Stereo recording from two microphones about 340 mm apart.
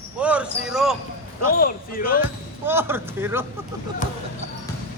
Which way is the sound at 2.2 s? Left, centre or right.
Centre.